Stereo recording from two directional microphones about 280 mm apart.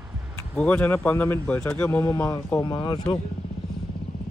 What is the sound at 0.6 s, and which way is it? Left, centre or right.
Speech, centre.